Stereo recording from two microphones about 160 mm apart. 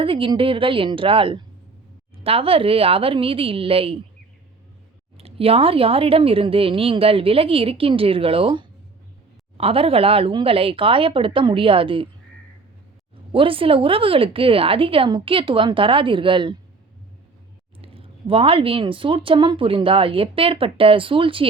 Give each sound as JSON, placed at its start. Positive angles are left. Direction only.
{"t": 0.0, "sound": "speech", "side_deg": -35}
{"t": 5.1, "sound": "speech", "side_deg": -40}
{"t": 13.3, "sound": "speech", "side_deg": -35}
{"t": 17.7, "sound": "speech", "side_deg": -35}